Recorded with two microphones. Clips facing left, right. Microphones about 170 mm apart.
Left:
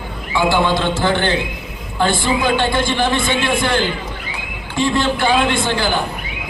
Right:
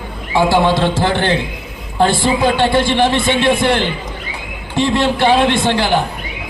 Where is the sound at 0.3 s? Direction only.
30° right (ahead or behind).